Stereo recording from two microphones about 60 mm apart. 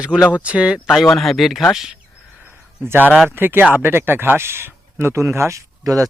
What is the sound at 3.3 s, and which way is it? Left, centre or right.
Speech, right.